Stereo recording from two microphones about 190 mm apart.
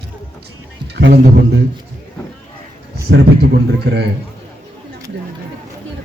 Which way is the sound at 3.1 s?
60° right (ahead or behind).